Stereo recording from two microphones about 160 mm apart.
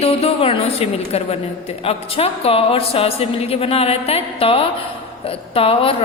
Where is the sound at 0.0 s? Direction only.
40° left (ahead or behind).